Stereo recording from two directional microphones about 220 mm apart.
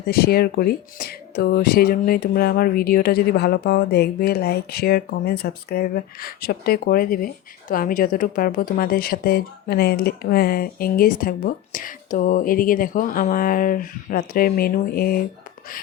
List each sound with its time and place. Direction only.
0.0 s speech: 45° left (ahead or behind)